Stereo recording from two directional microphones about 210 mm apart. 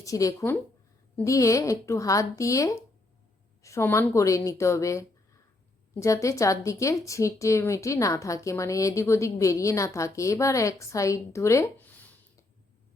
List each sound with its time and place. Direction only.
0.0 s a woman's voice: 15° left (ahead or behind)